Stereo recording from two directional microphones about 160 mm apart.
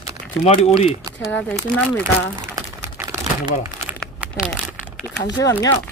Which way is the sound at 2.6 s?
20° right (ahead or behind).